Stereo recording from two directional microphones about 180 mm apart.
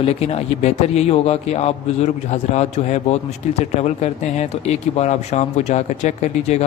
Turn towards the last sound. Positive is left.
turn(degrees=40)  # may be behind; listen again after turning